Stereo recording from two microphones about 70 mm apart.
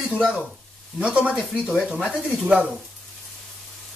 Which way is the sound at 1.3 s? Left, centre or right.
Centre.